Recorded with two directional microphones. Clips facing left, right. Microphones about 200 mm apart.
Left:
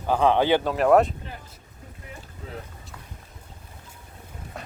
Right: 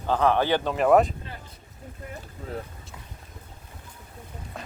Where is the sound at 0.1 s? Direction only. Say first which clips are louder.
Left 2 dB; 15° left (ahead or behind).